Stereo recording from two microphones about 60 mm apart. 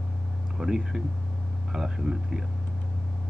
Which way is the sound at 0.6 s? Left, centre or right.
Centre.